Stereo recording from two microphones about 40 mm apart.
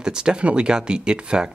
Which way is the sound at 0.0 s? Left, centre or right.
Right.